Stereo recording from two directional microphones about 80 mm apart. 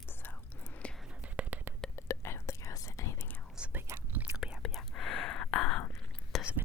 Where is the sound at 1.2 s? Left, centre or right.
Centre.